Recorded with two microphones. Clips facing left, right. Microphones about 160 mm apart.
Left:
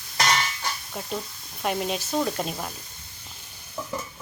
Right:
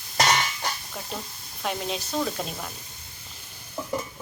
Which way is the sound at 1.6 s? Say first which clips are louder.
Left 3 dB; 5° left (ahead or behind).